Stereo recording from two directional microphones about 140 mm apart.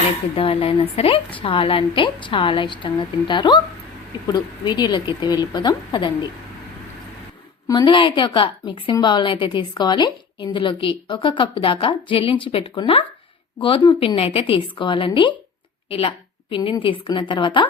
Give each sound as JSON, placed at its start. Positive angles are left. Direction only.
{"t": 0.3, "sound": "a woman's voice", "side_deg": 40}
{"t": 7.7, "sound": "a woman's voice", "side_deg": 30}